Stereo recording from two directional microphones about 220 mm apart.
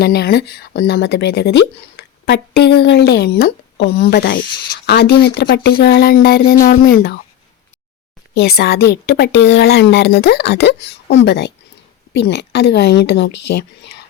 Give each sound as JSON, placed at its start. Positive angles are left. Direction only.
{"t": 0.0, "sound": "speech", "side_deg": 45}
{"t": 8.4, "sound": "speech", "side_deg": 50}